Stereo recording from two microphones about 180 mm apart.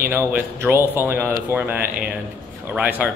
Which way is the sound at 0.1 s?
15° right (ahead or behind).